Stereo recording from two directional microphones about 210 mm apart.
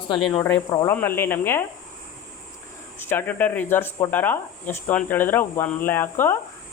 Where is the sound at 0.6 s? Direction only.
10° left (ahead or behind).